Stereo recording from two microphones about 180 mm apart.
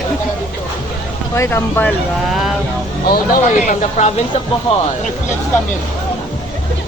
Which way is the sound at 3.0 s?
55° left (ahead or behind).